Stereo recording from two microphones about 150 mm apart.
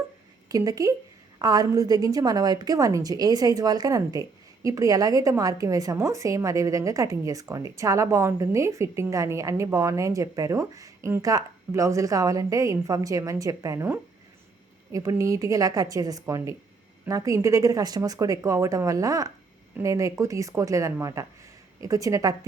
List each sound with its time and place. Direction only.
0.4 s a woman's voice: 25° right (ahead or behind)